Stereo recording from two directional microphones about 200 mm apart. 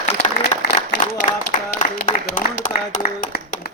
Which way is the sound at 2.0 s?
45° left (ahead or behind).